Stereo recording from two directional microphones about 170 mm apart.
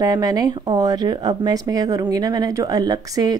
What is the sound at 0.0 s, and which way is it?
Speech, 20° right (ahead or behind).